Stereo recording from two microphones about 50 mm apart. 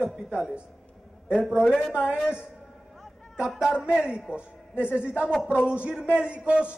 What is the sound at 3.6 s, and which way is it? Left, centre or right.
A man's voice, centre.